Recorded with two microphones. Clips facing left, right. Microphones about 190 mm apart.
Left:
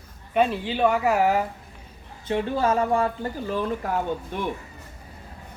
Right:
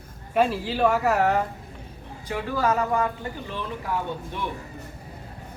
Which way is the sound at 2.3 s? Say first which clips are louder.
Left 2 dB; 25° left (ahead or behind).